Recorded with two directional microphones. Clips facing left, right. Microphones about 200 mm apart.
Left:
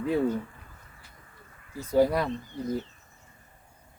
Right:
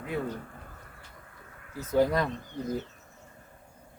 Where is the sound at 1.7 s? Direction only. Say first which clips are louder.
Left 2 dB; 10° left (ahead or behind).